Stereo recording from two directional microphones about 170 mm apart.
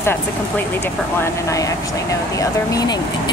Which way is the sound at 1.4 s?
20° left (ahead or behind).